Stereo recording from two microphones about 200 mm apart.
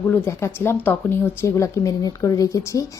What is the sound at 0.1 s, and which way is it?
Speech, 10° left (ahead or behind).